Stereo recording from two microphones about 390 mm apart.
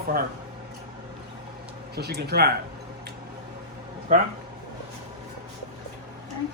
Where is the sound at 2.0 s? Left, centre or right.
Right.